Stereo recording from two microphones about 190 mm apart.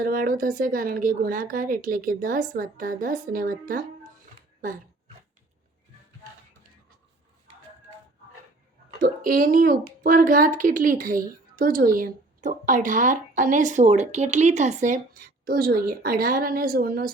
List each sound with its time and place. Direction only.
0.0 s a woman's voice: 50° right (ahead or behind)
4.6 s dog: 45° right (ahead or behind)
9.0 s a woman's voice: 45° right (ahead or behind)